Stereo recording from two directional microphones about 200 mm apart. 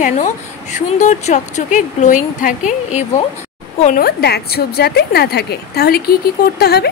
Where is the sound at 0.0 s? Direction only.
35° left (ahead or behind).